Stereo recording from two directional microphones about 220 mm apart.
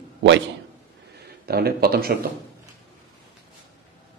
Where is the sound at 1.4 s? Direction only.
45° right (ahead or behind).